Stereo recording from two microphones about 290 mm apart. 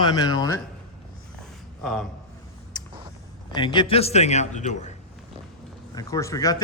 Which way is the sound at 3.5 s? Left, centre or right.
Centre.